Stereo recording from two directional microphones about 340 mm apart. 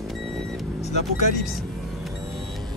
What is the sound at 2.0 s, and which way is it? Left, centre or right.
Music, centre.